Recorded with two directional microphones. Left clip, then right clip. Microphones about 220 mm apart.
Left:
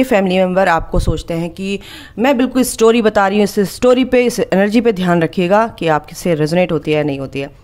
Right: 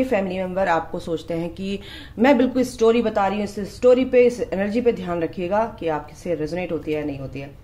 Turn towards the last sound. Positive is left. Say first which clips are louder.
# left 11 dB
turn(degrees=45)  # may be behind; listen again after turning